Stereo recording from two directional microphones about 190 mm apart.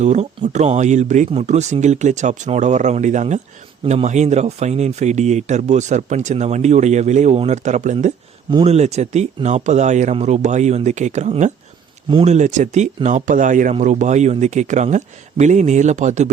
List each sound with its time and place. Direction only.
0.0 s speech: 40° right (ahead or behind)
8.4 s speech: 30° right (ahead or behind)